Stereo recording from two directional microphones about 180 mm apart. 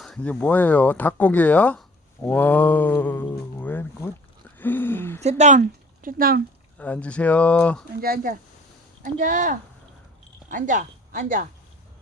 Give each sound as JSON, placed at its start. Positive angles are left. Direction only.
{"t": 0.0, "sound": "speech", "side_deg": 5}
{"t": 4.5, "sound": "a sound", "side_deg": 10}
{"t": 5.4, "sound": "speech", "side_deg": -45}
{"t": 6.7, "sound": "speech", "side_deg": 10}
{"t": 8.0, "sound": "speech", "side_deg": -55}